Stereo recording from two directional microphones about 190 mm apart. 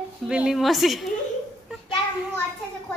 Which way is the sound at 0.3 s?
5° right (ahead or behind).